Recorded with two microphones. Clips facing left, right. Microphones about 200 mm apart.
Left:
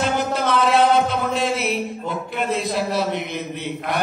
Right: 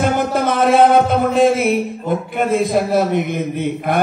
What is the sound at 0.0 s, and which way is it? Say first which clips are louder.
Music: right 5 dB; 50° right (ahead or behind).